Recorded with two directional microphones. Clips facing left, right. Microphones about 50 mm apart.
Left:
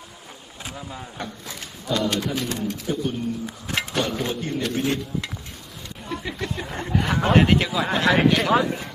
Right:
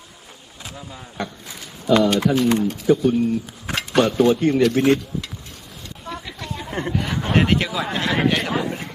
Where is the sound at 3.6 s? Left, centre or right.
Right.